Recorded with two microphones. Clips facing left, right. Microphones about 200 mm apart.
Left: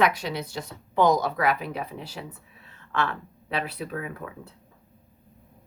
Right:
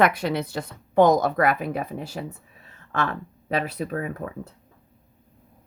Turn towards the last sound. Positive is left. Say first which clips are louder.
# right 5 dB
turn(degrees=-40)  # may be behind; listen again after turning